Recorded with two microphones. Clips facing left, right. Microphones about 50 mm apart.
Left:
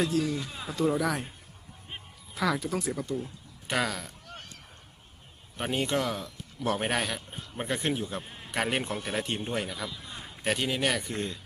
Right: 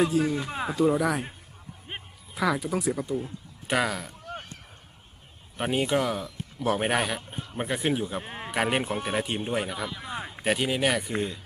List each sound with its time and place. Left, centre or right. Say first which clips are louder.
0.2 s speech: right 3 dB; right
0.5 s speech: right 8 dB; right
0.8 s speech: right 3 dB; centre
2.3 s speech: right 2 dB; centre
5.5 s speech: right 3 dB; centre
8.2 s sheep: right 8 dB; right
8.5 s speech: right 3 dB; centre
9.9 s a sound: right 8 dB; right
10.4 s speech: right 3 dB; centre